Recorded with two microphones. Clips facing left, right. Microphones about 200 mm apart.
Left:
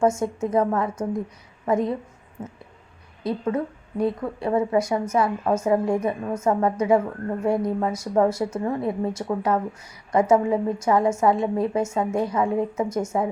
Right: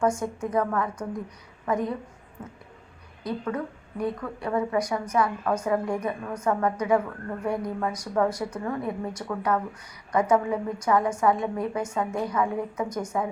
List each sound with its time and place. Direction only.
0.0 s a woman's voice: 25° left (ahead or behind)